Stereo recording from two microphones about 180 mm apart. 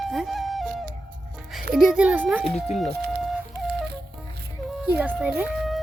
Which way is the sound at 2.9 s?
60° right (ahead or behind).